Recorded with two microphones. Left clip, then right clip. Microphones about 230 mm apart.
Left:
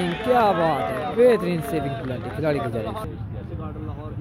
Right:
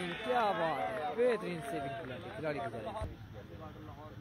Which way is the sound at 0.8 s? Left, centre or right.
Right.